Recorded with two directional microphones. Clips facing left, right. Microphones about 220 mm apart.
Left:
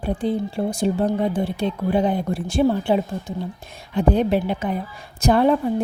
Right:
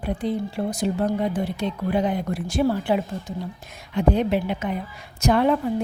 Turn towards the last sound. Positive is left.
turn(degrees=35)  # may be behind; listen again after turning